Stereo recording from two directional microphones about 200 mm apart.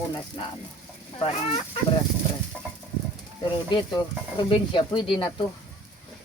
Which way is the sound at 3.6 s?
20° left (ahead or behind).